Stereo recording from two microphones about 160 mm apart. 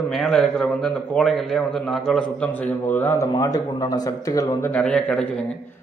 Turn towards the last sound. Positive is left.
turn(degrees=5)  # may be behind; listen again after turning